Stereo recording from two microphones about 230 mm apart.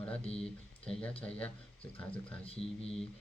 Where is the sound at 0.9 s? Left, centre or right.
Centre.